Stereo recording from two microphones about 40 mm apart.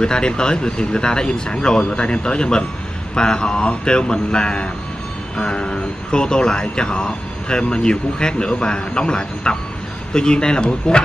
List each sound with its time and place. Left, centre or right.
0.0 s speech: left